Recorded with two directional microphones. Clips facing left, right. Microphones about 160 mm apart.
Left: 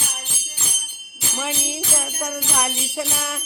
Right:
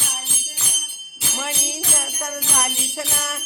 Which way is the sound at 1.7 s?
Centre (ahead or behind).